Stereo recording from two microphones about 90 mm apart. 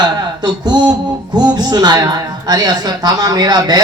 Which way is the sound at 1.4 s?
50° right (ahead or behind).